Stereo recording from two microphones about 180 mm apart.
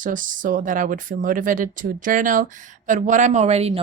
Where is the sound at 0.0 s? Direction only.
45° right (ahead or behind).